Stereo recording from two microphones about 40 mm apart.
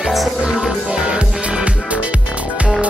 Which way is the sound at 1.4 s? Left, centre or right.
Right.